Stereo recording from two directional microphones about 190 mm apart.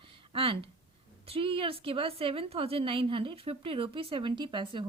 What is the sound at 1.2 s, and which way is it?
A woman's voice, 30° right (ahead or behind).